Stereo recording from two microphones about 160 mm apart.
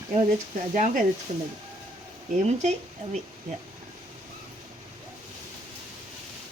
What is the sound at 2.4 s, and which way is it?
Speech, 45° right (ahead or behind).